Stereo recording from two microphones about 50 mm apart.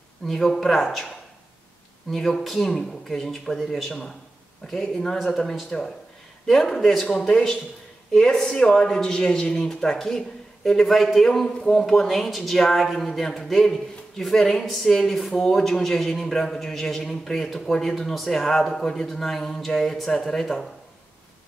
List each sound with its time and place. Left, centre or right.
0.3 s speech: centre
2.0 s speech: centre
4.6 s a man's voice: centre
7.2 s a man's voice: centre